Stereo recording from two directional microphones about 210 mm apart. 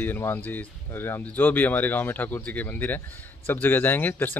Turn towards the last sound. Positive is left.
turn(degrees=10)  # may be behind; listen again after turning